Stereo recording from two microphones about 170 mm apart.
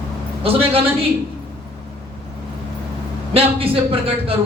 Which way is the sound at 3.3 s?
35° right (ahead or behind).